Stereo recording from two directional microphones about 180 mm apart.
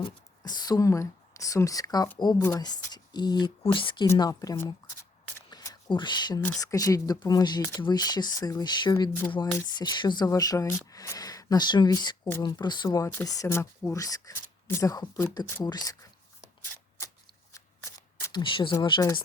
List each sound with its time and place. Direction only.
0.0 s speech: 25° left (ahead or behind)
4.0 s speech: 15° left (ahead or behind)
5.5 s a sound: 20° left (ahead or behind)
6.4 s speech: 20° left (ahead or behind)
18.3 s speech: 25° left (ahead or behind)